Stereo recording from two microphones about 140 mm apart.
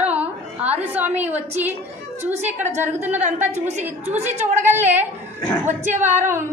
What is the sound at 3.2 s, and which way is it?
A woman's voice, 55° right (ahead or behind).